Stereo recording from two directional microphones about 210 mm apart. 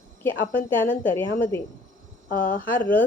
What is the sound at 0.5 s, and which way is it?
Speech, 40° left (ahead or behind).